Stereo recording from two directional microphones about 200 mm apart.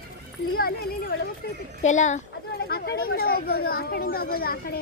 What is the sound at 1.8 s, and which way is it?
Speech, 35° left (ahead or behind).